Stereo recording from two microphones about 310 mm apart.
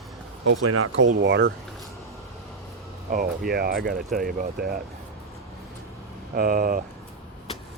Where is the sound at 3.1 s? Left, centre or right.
Right.